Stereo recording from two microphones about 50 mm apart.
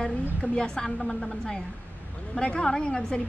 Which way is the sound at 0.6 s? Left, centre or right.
Centre.